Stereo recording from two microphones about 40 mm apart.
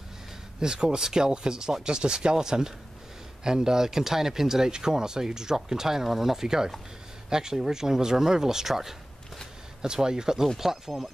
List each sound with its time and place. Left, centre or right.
0.6 s speech: centre